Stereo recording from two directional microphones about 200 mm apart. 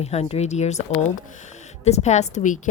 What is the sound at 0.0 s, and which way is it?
A woman's voice, 30° left (ahead or behind).